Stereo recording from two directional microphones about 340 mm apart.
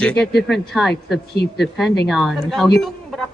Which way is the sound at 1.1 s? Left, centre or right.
Left.